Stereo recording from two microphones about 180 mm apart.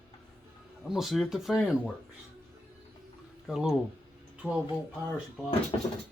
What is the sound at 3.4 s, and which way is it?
Speech, centre (ahead or behind).